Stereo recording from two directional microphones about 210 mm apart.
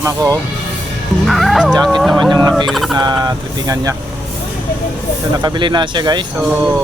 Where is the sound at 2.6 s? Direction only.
Centre (ahead or behind).